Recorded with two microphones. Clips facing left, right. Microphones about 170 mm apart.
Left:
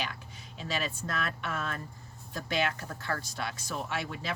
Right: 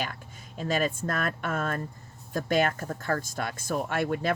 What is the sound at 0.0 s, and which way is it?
Speech, 50° right (ahead or behind).